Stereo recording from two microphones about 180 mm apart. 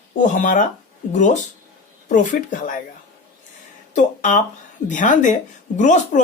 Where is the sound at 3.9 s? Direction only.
45° left (ahead or behind).